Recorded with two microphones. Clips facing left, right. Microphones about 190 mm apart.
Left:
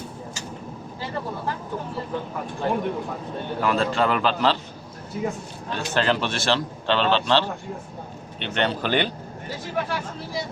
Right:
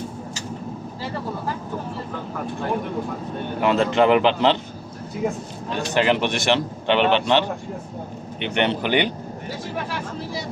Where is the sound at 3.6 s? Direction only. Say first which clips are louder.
Right 5 dB; 20° right (ahead or behind).